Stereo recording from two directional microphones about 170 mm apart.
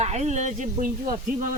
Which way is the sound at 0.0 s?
40° right (ahead or behind).